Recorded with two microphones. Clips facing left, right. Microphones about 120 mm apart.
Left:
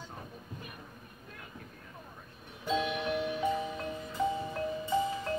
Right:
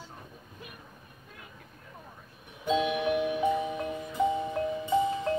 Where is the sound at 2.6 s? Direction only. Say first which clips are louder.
Right 5 dB; 15° right (ahead or behind).